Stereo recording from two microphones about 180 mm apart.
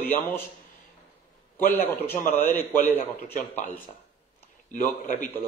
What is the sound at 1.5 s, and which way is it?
A man's voice, 10° left (ahead or behind).